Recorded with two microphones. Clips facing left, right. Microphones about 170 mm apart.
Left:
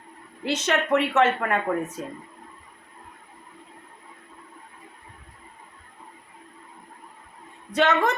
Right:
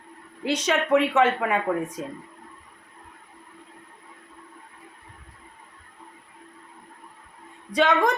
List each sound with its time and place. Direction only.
0.5 s speech: 10° right (ahead or behind)
7.7 s a woman's voice: 10° right (ahead or behind)